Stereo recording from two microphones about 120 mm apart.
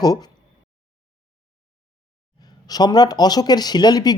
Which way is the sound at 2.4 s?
35° left (ahead or behind).